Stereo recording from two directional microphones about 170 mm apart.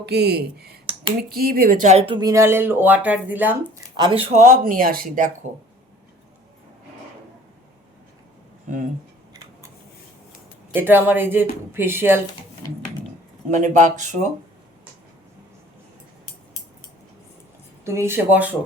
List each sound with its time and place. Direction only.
0.0 s speech: 70° right (ahead or behind); by 3.6 s 10° right (ahead or behind)
3.9 s speech: 30° right (ahead or behind); by 5.5 s 50° right (ahead or behind)
8.7 s speech: 50° right (ahead or behind)
10.8 s speech: 10° right (ahead or behind)
13.5 s speech: 45° right (ahead or behind)
17.8 s speech: 15° right (ahead or behind)